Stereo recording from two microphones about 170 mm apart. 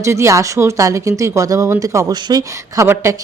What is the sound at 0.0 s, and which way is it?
Speech, 15° right (ahead or behind).